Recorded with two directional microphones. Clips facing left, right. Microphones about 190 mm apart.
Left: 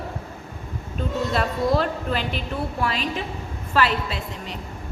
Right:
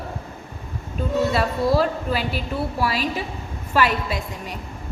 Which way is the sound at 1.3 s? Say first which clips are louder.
Right 2 dB; 5° right (ahead or behind).